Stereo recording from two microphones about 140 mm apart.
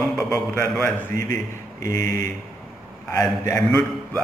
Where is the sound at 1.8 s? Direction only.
25° left (ahead or behind).